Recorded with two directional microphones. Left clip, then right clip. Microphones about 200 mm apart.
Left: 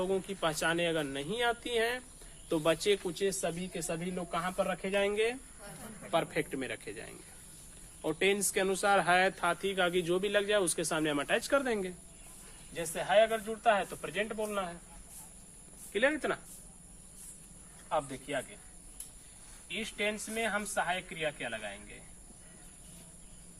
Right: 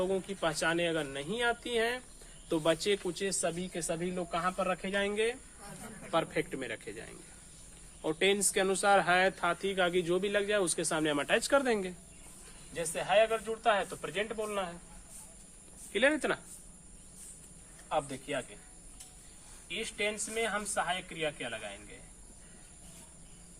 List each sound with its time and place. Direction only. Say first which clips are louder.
0.0 s speech: even; 10° left (ahead or behind)
8.0 s speech: right 1 dB; centre (ahead or behind); by 14.8 s 25° right (ahead or behind)
15.9 s speech: right 2 dB; 40° right (ahead or behind)
17.8 s speech: even; 25° right (ahead or behind)
19.6 s speech: even; 20° right (ahead or behind)